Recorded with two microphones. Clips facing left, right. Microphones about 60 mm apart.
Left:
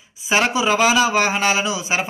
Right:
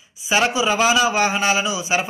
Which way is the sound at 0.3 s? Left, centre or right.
Left.